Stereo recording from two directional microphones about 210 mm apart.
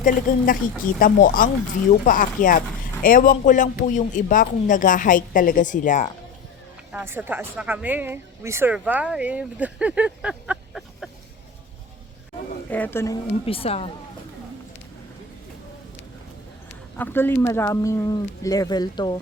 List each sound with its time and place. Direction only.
0.0 s a man's voice: 40° left (ahead or behind)
6.9 s speech: 10° right (ahead or behind)
12.7 s speech: 10° left (ahead or behind)
13.4 s a woman's voice: 25° left (ahead or behind)
17.0 s speech: 10° left (ahead or behind)